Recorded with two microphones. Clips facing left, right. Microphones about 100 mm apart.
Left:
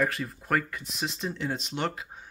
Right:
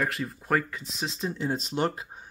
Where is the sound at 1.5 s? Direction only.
40° right (ahead or behind).